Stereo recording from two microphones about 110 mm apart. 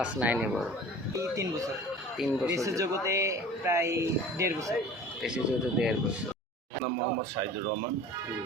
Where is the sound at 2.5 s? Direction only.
30° right (ahead or behind).